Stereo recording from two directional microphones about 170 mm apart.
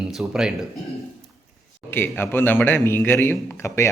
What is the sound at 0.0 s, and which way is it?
Speech, centre (ahead or behind).